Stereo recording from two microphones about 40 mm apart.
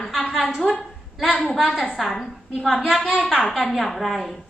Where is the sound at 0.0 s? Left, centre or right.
Centre.